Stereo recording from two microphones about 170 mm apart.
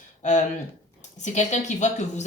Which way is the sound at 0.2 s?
45° left (ahead or behind).